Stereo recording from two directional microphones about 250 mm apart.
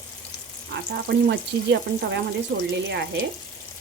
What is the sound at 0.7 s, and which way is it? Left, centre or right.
Frying, right.